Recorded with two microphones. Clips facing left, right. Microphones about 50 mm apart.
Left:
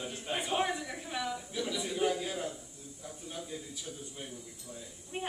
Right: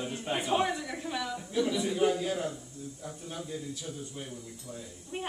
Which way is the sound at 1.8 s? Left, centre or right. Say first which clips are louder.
Right 4 dB; centre.